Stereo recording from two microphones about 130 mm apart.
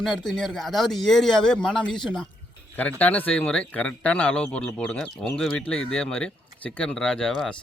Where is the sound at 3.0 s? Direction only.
15° left (ahead or behind).